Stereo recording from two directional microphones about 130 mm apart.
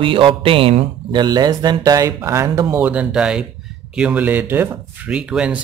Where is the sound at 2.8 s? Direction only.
10° right (ahead or behind).